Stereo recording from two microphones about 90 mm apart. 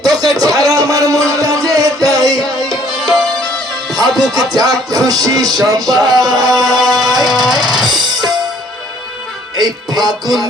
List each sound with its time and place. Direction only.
0.0 s music: 45° right (ahead or behind)
4.3 s music: 45° right (ahead or behind)
6.7 s music: centre (ahead or behind)
7.6 s music: 50° right (ahead or behind)
9.6 s music: 45° right (ahead or behind)